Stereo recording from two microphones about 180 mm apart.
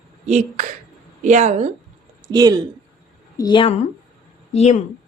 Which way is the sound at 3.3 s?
25° left (ahead or behind).